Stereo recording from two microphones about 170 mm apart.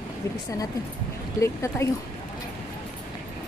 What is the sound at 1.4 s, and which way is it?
Speech, 15° left (ahead or behind).